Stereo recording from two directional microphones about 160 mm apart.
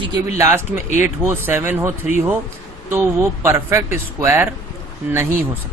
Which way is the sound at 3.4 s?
15° right (ahead or behind).